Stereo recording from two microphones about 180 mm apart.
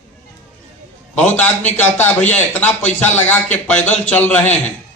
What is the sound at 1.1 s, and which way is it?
A man's voice, 10° left (ahead or behind).